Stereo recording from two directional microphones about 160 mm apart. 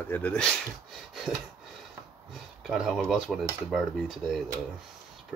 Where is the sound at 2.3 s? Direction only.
Centre (ahead or behind).